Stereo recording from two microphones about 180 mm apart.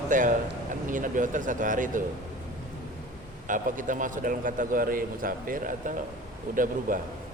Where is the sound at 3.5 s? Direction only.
45° right (ahead or behind).